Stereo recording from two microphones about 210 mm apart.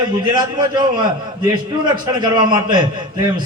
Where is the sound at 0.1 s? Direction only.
20° right (ahead or behind).